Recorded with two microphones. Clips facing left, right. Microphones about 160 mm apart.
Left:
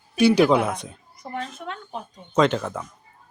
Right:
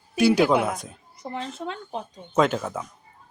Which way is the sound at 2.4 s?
5° right (ahead or behind).